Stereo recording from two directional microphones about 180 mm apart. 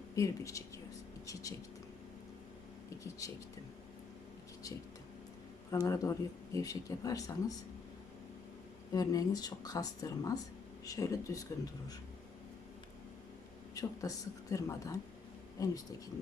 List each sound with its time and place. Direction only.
0.2 s a woman's voice: 15° left (ahead or behind)
3.2 s speech: 20° left (ahead or behind)
5.7 s speech: 20° left (ahead or behind)
8.9 s speech: 20° left (ahead or behind)
13.7 s speech: 20° left (ahead or behind)